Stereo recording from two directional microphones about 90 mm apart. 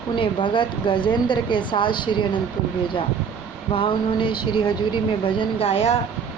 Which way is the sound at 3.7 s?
70° left (ahead or behind).